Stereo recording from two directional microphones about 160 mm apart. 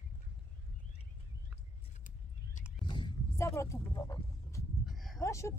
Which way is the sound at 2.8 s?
30° left (ahead or behind).